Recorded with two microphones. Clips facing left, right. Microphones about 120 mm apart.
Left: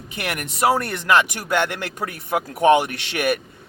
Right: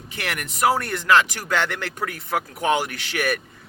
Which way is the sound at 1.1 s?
15° left (ahead or behind).